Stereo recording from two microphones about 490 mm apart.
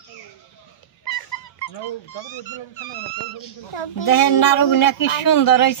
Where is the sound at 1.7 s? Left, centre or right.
Left.